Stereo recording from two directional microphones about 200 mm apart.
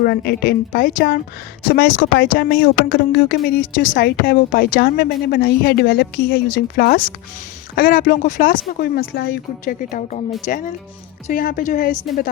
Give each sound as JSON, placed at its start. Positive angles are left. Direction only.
{"t": 0.0, "sound": "a woman's voice", "side_deg": 50}